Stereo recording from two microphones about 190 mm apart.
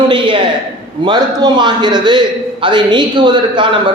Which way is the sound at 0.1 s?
25° right (ahead or behind).